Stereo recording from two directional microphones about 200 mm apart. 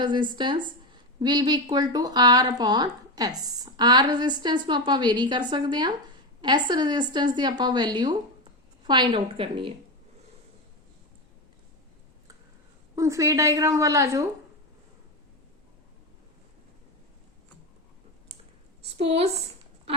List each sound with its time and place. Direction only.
0.0 s speech: 20° right (ahead or behind)
13.0 s a woman's voice: 15° right (ahead or behind)
18.9 s speech: 30° right (ahead or behind)